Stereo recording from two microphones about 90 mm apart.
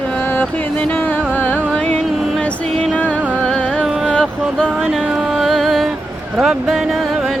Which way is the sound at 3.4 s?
10° left (ahead or behind).